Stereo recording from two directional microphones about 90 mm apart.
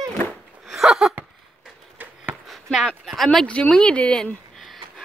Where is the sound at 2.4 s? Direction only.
Centre (ahead or behind).